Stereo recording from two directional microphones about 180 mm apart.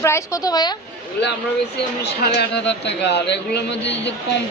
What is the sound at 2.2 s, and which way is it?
A woman's voice, 70° left (ahead or behind).